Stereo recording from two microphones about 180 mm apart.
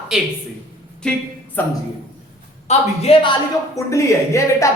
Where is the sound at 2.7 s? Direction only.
35° left (ahead or behind).